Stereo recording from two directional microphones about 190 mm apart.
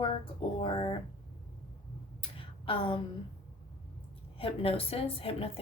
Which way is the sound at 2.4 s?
25° left (ahead or behind).